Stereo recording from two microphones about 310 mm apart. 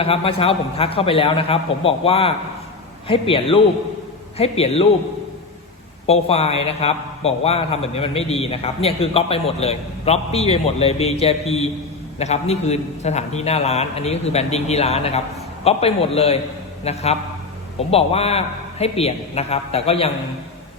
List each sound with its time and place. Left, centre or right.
0.0 s a man's voice: centre
6.1 s a man's voice: centre